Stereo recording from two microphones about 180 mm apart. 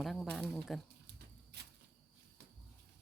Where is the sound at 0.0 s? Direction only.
Centre (ahead or behind).